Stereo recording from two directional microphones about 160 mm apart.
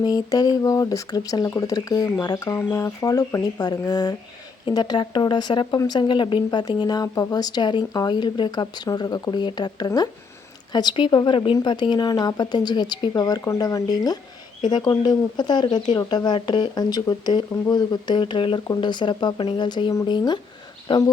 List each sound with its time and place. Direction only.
0.0 s speech: 25° left (ahead or behind)